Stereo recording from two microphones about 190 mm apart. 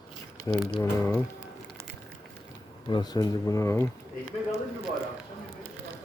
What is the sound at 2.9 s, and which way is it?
Speech, 20° left (ahead or behind).